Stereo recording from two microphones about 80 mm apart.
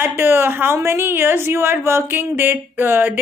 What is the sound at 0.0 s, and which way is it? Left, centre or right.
A woman's voice, right.